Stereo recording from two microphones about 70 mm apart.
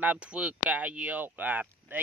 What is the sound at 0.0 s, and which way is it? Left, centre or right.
Speech, centre.